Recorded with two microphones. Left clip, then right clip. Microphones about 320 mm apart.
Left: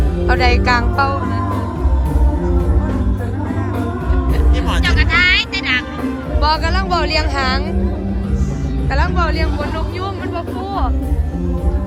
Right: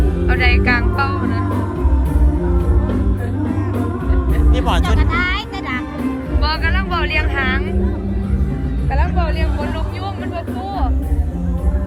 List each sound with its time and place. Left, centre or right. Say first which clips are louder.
0.3 s music: left 2 dB; centre
4.5 s music: right 4 dB; right
4.9 s music: left 6 dB; centre
6.4 s music: left 4 dB; centre